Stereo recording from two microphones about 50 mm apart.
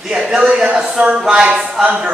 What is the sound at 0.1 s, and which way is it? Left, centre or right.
A woman's voice, centre.